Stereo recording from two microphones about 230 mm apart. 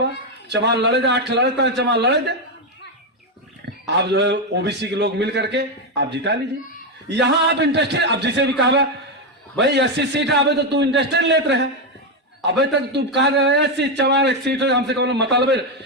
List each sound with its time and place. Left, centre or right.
0.0 s a man's voice: right
3.8 s a man's voice: right